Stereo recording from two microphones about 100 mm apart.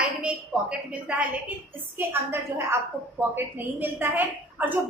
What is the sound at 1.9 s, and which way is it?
A woman's voice, 25° right (ahead or behind).